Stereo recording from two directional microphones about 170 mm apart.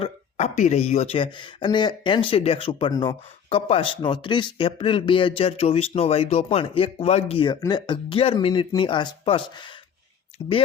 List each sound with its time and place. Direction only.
0.0 s speech: 35° left (ahead or behind)